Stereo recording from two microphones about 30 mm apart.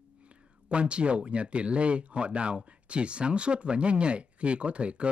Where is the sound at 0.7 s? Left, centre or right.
Right.